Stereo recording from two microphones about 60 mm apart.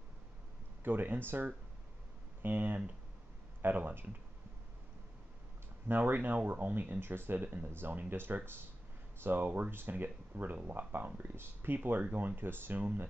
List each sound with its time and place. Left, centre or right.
0.8 s speech: right
5.9 s speech: right